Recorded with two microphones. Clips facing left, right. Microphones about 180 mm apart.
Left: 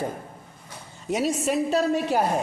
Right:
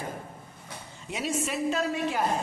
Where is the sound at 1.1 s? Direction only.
40° left (ahead or behind).